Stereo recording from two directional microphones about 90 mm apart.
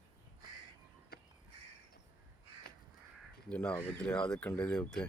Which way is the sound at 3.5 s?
15° left (ahead or behind).